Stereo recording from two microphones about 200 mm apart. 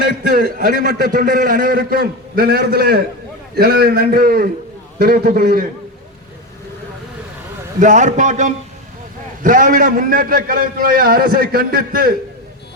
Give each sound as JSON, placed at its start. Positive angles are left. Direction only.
{"t": 0.3, "sound": "a man's voice", "side_deg": -45}
{"t": 7.8, "sound": "a man's voice", "side_deg": -40}